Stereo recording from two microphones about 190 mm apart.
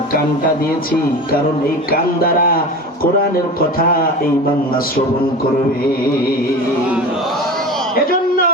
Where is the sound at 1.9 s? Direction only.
50° left (ahead or behind).